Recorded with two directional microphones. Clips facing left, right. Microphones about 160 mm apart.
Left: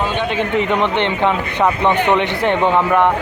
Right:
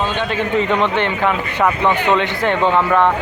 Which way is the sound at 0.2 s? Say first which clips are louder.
Even; 15° left (ahead or behind).